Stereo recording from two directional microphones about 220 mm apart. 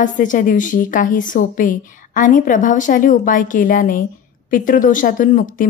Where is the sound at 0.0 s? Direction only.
35° left (ahead or behind).